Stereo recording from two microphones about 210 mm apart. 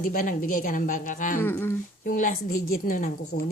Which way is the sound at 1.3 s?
10° left (ahead or behind).